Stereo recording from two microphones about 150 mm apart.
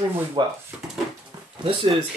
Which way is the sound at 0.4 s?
30° right (ahead or behind).